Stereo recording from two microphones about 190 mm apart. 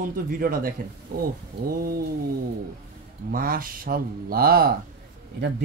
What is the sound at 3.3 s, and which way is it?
A man's voice, 50° right (ahead or behind).